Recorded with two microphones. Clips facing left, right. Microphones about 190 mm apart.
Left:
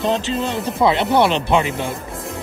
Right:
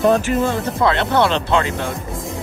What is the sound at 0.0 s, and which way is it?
Speech, 20° left (ahead or behind).